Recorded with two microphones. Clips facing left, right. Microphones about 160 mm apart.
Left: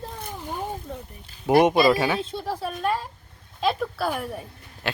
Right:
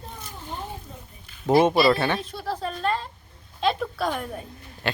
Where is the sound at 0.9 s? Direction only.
65° left (ahead or behind).